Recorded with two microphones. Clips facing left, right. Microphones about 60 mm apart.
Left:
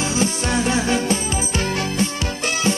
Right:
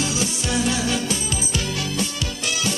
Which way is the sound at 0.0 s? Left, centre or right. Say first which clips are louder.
Left 4 dB; left.